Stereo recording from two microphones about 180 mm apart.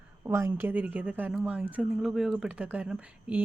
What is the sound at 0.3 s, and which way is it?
Speech, 15° right (ahead or behind).